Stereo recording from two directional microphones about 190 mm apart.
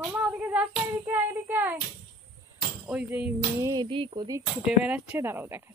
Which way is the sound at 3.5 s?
20° right (ahead or behind).